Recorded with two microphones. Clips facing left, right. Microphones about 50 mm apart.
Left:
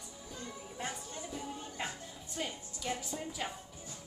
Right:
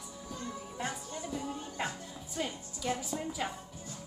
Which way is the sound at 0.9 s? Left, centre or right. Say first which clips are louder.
Right 4 dB; centre.